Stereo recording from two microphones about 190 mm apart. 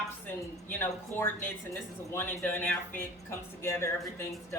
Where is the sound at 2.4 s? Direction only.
10° left (ahead or behind).